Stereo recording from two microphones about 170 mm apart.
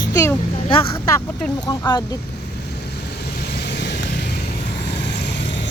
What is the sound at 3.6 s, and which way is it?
Vehicle, 85° left.